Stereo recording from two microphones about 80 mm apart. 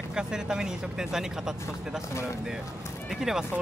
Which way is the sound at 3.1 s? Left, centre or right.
Centre.